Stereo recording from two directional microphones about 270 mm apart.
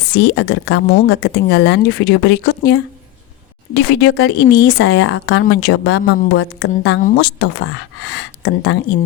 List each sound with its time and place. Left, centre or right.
0.0 s speech: left